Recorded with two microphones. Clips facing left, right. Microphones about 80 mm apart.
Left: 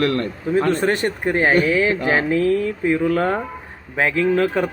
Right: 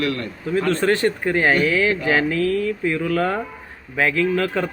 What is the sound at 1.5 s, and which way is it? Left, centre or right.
Speech, left.